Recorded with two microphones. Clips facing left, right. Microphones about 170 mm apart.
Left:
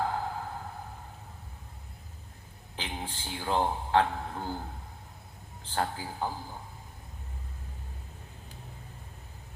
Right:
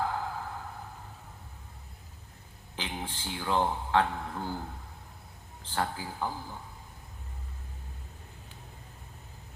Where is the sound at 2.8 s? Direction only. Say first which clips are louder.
Right 1 dB; 30° left (ahead or behind).